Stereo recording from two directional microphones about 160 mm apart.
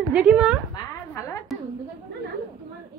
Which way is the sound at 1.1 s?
20° left (ahead or behind).